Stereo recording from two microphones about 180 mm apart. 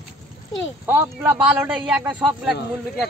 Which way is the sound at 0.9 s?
10° right (ahead or behind).